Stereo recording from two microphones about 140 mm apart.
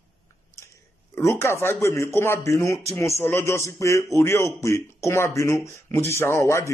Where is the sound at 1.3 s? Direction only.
15° left (ahead or behind).